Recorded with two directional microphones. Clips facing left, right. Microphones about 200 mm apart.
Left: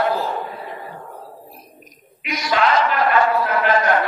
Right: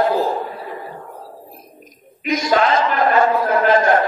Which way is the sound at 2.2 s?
45° right (ahead or behind).